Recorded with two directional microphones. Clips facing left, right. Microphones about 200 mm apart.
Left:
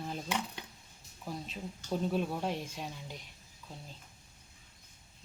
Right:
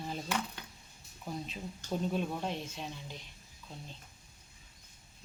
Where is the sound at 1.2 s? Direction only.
Centre (ahead or behind).